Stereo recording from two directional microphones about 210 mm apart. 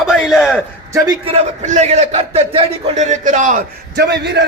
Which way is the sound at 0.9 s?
25° right (ahead or behind).